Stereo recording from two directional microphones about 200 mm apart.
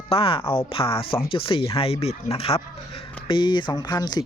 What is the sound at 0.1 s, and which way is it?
Speech, 25° left (ahead or behind).